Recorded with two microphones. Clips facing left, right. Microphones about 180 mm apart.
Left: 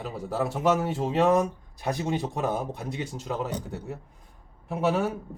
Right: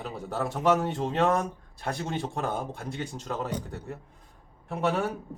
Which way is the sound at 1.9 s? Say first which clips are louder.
Left 4 dB; 15° left (ahead or behind).